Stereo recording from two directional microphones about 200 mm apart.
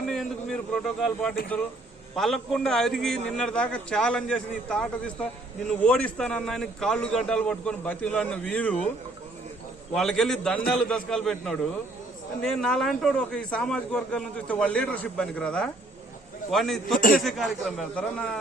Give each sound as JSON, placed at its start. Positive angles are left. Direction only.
{"t": 0.1, "sound": "a man's voice", "side_deg": 0}
{"t": 9.9, "sound": "a man's voice", "side_deg": 0}
{"t": 17.0, "sound": "a man's voice", "side_deg": 45}
{"t": 17.2, "sound": "a man's voice", "side_deg": 0}